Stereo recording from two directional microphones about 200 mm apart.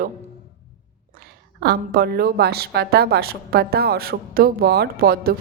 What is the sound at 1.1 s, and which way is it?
A woman's voice, 50° right (ahead or behind).